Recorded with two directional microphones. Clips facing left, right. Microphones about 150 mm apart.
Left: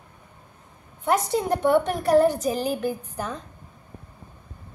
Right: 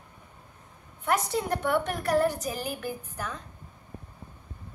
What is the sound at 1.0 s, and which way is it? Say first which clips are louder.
A woman's voice: left 5 dB; 25° left (ahead or behind).